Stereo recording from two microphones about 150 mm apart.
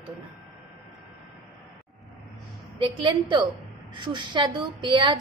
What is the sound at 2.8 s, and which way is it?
A woman's voice, 30° right (ahead or behind).